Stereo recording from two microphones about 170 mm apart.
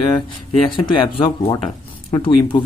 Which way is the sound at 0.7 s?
30° left (ahead or behind).